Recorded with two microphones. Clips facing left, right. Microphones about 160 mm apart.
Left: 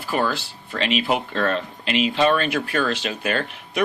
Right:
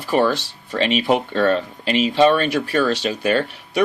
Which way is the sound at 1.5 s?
35° right (ahead or behind).